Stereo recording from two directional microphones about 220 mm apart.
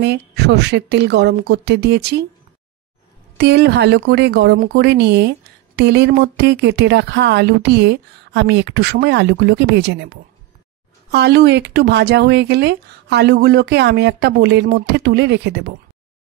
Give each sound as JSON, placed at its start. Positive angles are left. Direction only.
{"t": 0.0, "sound": "speech", "side_deg": -50}
{"t": 3.3, "sound": "speech", "side_deg": -50}